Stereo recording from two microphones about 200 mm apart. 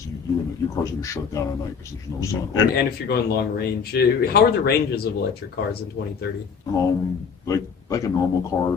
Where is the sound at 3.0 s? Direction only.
50° left (ahead or behind).